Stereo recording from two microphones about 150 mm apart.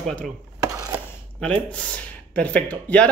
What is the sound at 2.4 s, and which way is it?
Speech, 10° left (ahead or behind).